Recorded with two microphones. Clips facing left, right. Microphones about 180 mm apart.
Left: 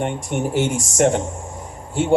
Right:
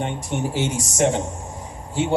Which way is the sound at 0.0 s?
50° left (ahead or behind).